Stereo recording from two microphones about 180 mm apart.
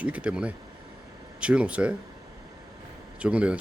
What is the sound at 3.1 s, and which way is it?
Speech, 5° right (ahead or behind).